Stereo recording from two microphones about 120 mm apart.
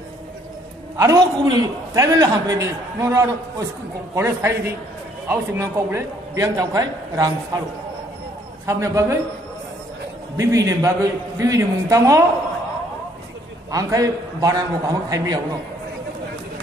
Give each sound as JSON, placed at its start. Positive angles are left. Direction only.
{"t": 0.9, "sound": "a man's voice", "side_deg": -25}
{"t": 8.6, "sound": "a man's voice", "side_deg": -25}
{"t": 10.3, "sound": "a man's voice", "side_deg": -25}
{"t": 13.7, "sound": "a man's voice", "side_deg": -30}